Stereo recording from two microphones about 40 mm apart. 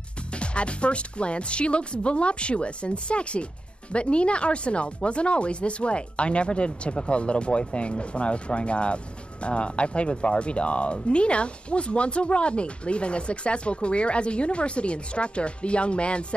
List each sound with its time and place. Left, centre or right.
0.3 s speech: left